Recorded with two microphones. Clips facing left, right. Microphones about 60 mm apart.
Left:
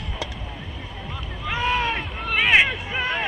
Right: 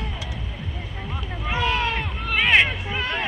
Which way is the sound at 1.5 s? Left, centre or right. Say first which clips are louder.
Even; centre.